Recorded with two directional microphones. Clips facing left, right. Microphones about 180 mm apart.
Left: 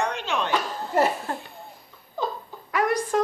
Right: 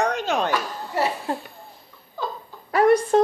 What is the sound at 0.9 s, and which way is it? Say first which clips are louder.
Speech: left 3 dB; 50° left (ahead or behind).